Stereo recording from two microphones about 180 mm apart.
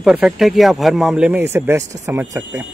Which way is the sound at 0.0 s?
Centre (ahead or behind).